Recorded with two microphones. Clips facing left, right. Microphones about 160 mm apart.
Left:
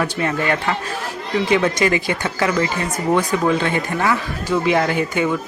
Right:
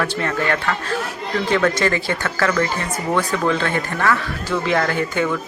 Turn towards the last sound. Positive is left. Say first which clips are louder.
# left 1 dB
turn(degrees=15)  # may be behind; listen again after turning